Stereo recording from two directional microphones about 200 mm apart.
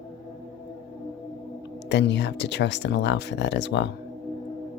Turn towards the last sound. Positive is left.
turn(degrees=60)  # may be behind; listen again after turning